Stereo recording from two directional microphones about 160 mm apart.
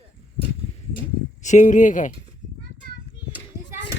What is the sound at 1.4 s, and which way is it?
Speech, 50° left (ahead or behind).